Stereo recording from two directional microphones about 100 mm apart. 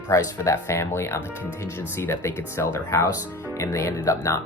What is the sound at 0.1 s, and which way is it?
Speech, 35° left (ahead or behind).